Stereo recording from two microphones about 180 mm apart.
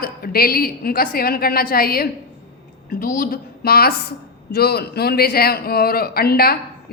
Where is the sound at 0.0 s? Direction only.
55° left (ahead or behind).